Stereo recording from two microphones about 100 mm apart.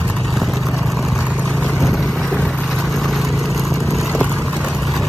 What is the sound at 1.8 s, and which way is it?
Vehicle, centre (ahead or behind).